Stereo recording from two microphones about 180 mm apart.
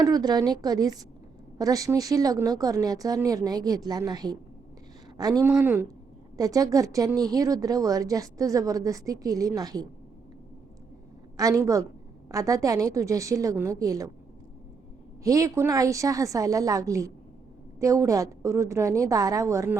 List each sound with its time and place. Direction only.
0.0 s a woman's voice: 20° right (ahead or behind)
11.3 s a woman's voice: 20° right (ahead or behind)
15.2 s a woman's voice: 20° right (ahead or behind)